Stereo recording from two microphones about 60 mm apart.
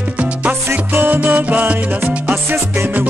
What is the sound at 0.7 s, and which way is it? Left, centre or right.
Music, right.